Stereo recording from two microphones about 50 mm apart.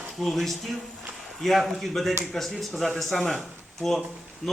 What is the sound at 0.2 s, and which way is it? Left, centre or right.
Speech, centre.